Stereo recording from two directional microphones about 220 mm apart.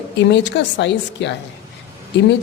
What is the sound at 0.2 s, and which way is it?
A woman's voice, 55° left (ahead or behind).